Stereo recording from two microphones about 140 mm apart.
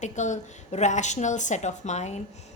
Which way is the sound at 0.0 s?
60° left (ahead or behind).